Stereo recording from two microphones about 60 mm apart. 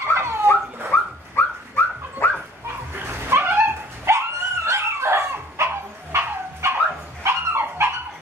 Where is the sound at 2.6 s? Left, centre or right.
Right.